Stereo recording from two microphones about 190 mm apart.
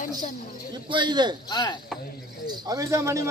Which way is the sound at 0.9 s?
25° right (ahead or behind).